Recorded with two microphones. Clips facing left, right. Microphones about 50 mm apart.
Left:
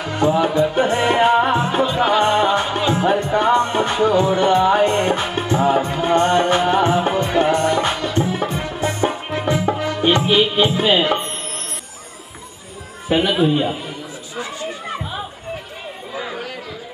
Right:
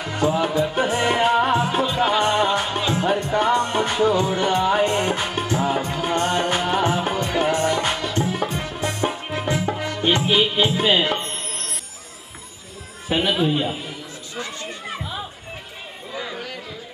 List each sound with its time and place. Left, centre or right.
0.0 s music: centre
13.1 s a sound: centre
16.2 s chatter: centre